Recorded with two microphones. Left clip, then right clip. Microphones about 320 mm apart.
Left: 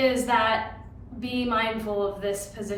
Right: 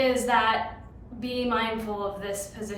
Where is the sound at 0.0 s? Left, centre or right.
Centre.